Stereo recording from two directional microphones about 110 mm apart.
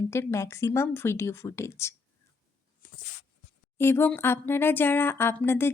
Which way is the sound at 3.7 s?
20° left (ahead or behind).